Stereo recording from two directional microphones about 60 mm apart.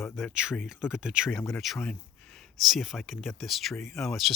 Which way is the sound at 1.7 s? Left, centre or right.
Centre.